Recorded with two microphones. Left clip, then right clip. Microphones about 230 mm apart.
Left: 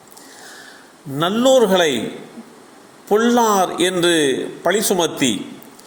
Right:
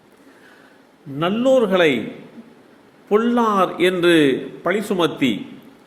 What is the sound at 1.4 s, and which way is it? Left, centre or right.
Speech, centre.